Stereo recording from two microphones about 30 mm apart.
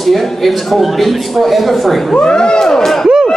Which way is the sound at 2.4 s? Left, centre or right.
Left.